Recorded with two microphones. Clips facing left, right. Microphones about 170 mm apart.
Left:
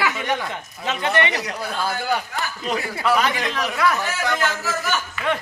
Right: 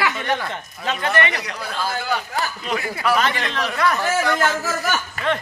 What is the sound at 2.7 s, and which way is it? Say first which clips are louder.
Speech: left 2 dB; 30° left (ahead or behind).